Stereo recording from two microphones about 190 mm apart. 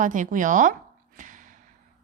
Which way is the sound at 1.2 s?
45° right (ahead or behind).